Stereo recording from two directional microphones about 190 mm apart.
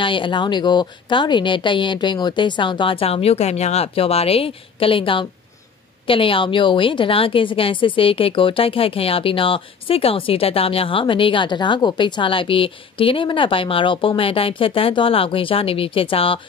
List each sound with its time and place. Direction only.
0.0 s a woman's voice: 25° left (ahead or behind)